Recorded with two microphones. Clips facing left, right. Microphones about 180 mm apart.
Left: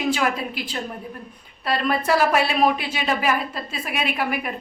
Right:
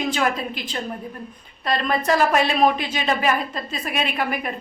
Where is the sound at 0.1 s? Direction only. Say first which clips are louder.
Even; 10° left (ahead or behind).